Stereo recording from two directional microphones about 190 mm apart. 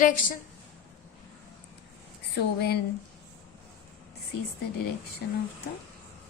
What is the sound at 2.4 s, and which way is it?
Speech, 60° left (ahead or behind).